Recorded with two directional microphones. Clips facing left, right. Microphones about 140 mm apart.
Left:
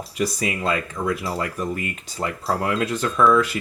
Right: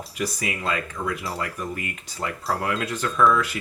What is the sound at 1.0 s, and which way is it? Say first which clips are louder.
Speech: left 5 dB; 20° left (ahead or behind).